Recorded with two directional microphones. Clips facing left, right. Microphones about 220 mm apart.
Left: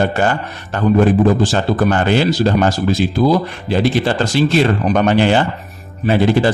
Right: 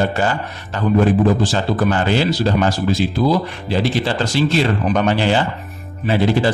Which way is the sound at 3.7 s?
50° left (ahead or behind).